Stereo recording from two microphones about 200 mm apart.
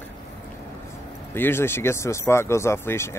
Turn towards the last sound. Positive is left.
turn(degrees=10)  # may be behind; listen again after turning